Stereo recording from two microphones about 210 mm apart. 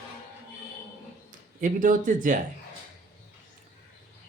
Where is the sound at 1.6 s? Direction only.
35° right (ahead or behind).